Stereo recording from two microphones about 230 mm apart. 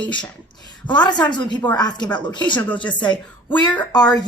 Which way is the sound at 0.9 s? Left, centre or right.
Centre.